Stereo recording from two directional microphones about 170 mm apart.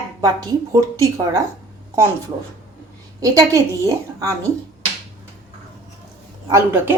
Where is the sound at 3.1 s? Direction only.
20° right (ahead or behind).